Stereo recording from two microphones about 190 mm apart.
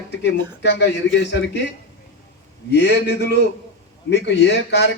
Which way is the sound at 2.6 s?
65° left (ahead or behind).